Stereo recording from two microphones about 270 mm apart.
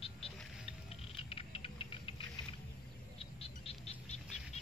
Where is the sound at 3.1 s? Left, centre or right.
Left.